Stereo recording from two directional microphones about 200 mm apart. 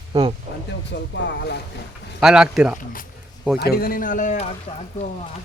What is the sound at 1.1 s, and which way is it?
Speech, 60° left (ahead or behind).